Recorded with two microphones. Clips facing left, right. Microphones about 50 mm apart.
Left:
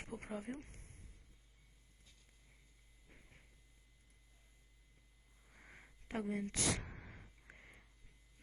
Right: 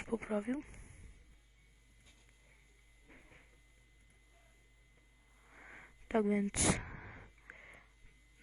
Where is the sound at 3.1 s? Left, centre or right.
Right.